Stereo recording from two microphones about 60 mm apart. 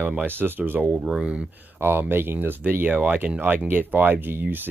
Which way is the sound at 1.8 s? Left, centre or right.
Right.